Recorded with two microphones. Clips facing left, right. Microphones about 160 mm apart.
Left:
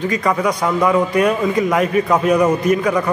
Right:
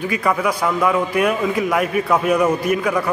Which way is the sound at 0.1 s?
5° right (ahead or behind).